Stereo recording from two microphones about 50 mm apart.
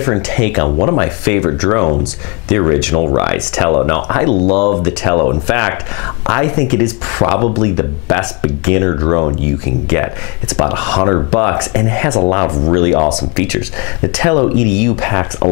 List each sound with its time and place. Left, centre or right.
0.0 s speech: centre